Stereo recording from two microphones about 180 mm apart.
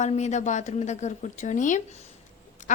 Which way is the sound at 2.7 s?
45° left (ahead or behind).